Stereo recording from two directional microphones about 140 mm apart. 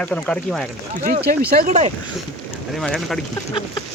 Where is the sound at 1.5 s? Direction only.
90° right.